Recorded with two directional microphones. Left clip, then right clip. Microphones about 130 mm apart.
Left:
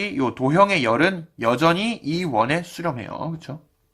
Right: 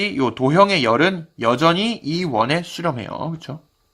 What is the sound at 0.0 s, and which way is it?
Speech, 15° right (ahead or behind).